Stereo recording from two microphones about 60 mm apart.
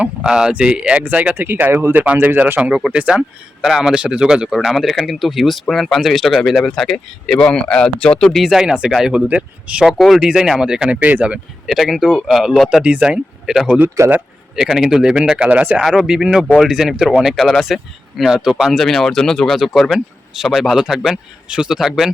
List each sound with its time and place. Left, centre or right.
0.0 s speech: centre
1.4 s speech: right
2.6 s speech: centre
3.1 s speech: centre
4.5 s speech: centre
8.4 s speech: centre
9.1 s speech: centre
11.0 s speech: right
11.6 s speech: centre
14.0 s speech: right
14.6 s speech: centre
17.3 s speech: centre